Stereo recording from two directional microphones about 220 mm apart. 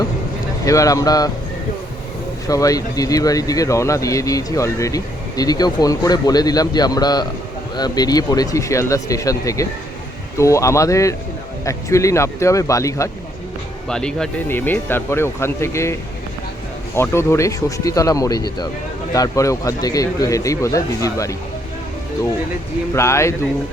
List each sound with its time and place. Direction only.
0.6 s speech: 15° left (ahead or behind)
2.5 s speech: 15° left (ahead or behind)
13.8 s speech: 5° left (ahead or behind)
23.0 s speech: 10° left (ahead or behind)